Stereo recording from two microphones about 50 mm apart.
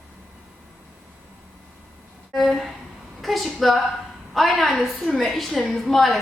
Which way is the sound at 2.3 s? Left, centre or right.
Centre.